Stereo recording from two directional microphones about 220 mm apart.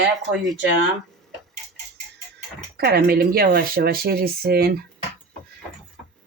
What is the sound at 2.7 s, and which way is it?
Speech, 45° right (ahead or behind).